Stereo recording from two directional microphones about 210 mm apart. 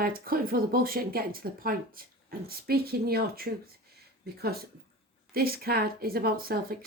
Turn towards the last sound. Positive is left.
turn(degrees=-45)  # may be behind; listen again after turning